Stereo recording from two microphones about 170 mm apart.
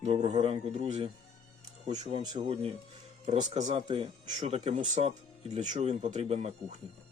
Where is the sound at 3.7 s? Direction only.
30° right (ahead or behind).